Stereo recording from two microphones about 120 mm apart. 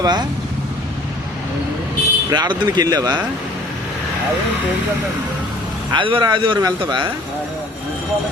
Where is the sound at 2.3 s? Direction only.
40° right (ahead or behind).